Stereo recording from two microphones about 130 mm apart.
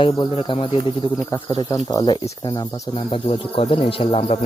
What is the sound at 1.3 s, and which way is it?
Speech, 30° left (ahead or behind).